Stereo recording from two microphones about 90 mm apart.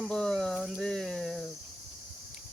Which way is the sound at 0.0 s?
5° left (ahead or behind).